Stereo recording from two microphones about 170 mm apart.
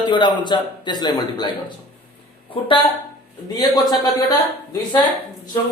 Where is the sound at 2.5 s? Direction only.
30° left (ahead or behind).